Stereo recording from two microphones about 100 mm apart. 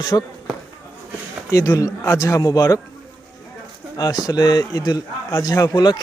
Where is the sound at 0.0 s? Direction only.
45° left (ahead or behind).